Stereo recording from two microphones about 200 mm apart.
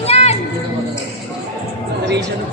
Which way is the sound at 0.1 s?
30° left (ahead or behind).